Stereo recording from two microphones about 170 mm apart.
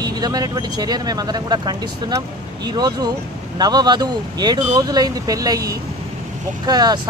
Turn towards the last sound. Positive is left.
turn(degrees=-25)  # may be behind; listen again after turning